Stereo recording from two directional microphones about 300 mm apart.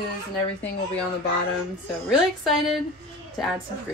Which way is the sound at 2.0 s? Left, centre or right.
Centre.